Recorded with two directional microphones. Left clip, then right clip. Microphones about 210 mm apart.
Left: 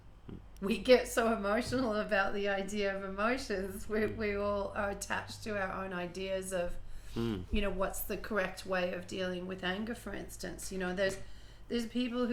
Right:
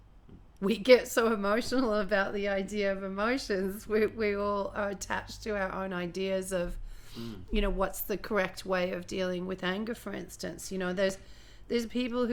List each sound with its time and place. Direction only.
0.6 s speech: 50° right (ahead or behind)